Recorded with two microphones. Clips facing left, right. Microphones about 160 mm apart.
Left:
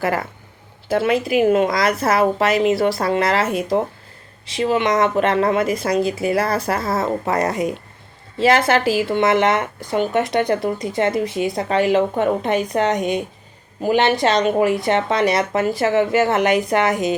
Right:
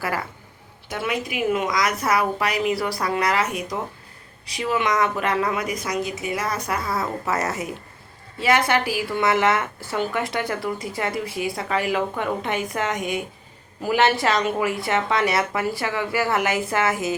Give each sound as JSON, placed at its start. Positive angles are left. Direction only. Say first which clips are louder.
{"t": 0.9, "sound": "a woman's voice", "louder": "left 9 dB", "side_deg": 30}